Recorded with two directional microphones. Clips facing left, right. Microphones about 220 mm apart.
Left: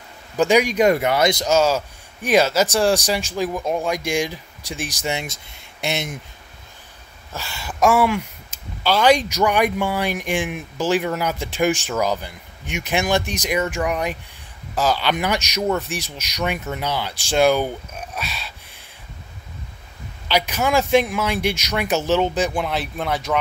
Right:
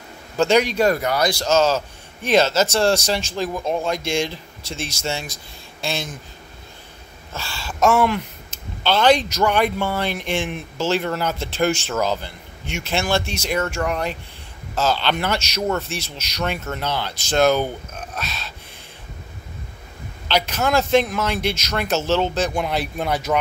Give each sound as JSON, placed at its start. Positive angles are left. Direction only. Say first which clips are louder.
{"t": 0.4, "sound": "speech", "louder": "left 1 dB", "side_deg": 10}
{"t": 7.3, "sound": "speech", "louder": "left 1 dB", "side_deg": 20}
{"t": 20.2, "sound": "speech", "louder": "even", "side_deg": 10}
{"t": 22.6, "sound": "speech", "louder": "right 1 dB", "side_deg": 0}